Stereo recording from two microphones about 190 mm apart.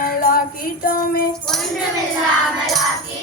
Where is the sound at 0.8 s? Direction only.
50° left (ahead or behind).